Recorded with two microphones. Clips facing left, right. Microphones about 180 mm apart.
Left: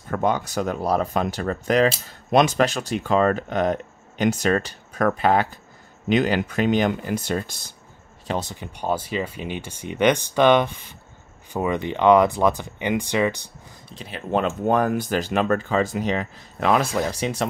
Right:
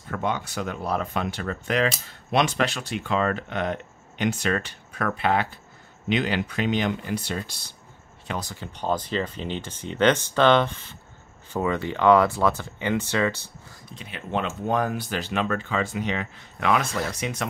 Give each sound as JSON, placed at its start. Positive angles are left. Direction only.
{"t": 0.1, "sound": "speech", "side_deg": 40}
{"t": 8.3, "sound": "speech", "side_deg": 25}
{"t": 8.7, "sound": "speech", "side_deg": 10}
{"t": 13.8, "sound": "speech", "side_deg": 35}